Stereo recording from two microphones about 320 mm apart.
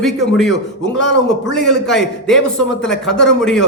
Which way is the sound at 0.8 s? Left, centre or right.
Left.